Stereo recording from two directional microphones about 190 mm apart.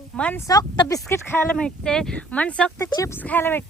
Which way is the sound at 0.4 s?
20° left (ahead or behind).